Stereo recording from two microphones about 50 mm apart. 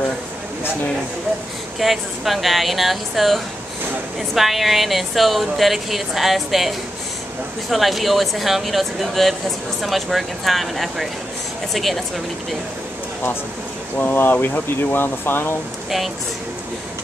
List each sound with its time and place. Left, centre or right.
1.8 s a woman's voice: centre
7.7 s a woman's voice: centre
13.9 s speech: left